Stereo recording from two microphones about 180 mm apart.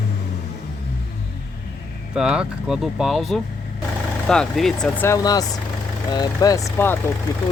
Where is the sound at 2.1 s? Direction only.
5° right (ahead or behind).